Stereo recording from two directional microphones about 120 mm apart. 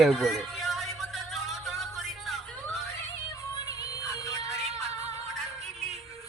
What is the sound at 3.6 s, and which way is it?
Music, 30° left (ahead or behind).